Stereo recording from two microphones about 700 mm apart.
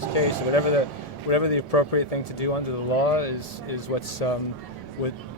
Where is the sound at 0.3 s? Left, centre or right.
Left.